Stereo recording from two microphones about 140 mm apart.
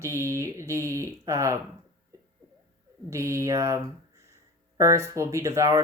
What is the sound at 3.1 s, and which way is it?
Speech, 20° right (ahead or behind).